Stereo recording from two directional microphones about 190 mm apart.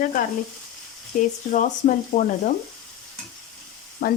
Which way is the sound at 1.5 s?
45° left (ahead or behind).